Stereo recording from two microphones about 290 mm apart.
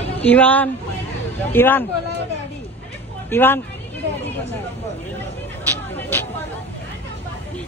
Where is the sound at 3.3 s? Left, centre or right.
Centre.